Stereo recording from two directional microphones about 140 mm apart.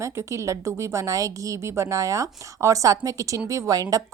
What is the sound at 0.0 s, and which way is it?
Speech, 20° right (ahead or behind).